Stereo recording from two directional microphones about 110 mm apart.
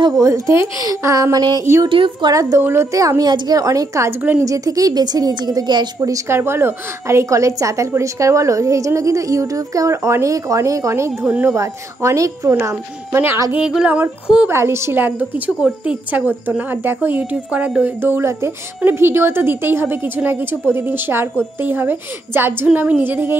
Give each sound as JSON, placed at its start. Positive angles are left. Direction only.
{"t": 0.2, "sound": "a woman's voice", "side_deg": -25}
{"t": 1.9, "sound": "a woman's voice", "side_deg": -50}
{"t": 2.6, "sound": "a woman's voice", "side_deg": -25}
{"t": 4.2, "sound": "a woman's voice", "side_deg": -15}
{"t": 4.5, "sound": "a woman's voice", "side_deg": -30}
{"t": 11.2, "sound": "a woman's voice", "side_deg": -10}
{"t": 11.5, "sound": "a woman's voice", "side_deg": -25}
{"t": 13.6, "sound": "a woman's voice", "side_deg": -5}
{"t": 14.5, "sound": "a woman's voice", "side_deg": -25}